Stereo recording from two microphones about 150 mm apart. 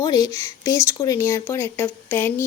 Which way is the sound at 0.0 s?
25° left (ahead or behind).